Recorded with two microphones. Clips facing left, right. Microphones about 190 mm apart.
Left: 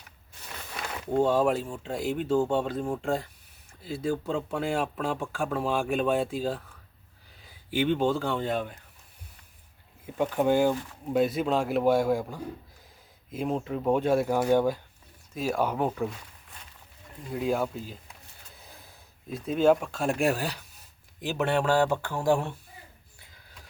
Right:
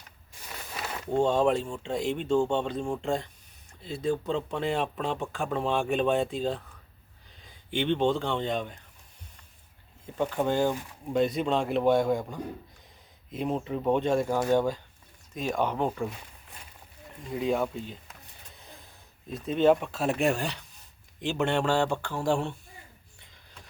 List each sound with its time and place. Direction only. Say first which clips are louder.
1.0 s speech: even; 5° left (ahead or behind)
10.2 s speech: left 3 dB; 10° left (ahead or behind)
17.3 s speech: even; centre (ahead or behind)
19.3 s speech: even; centre (ahead or behind)